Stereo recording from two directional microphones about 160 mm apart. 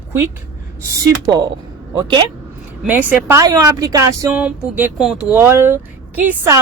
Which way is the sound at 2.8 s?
10° right (ahead or behind).